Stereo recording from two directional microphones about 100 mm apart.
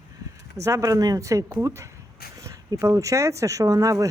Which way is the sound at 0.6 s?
35° right (ahead or behind).